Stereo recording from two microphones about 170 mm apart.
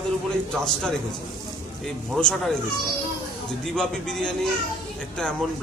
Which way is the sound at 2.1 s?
5° left (ahead or behind).